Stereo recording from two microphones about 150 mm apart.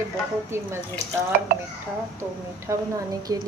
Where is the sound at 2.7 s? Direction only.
20° right (ahead or behind).